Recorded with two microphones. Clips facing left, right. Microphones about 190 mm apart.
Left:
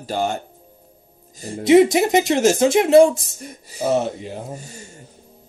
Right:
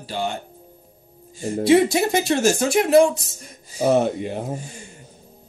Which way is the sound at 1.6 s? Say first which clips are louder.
Left 4 dB; 20° left (ahead or behind).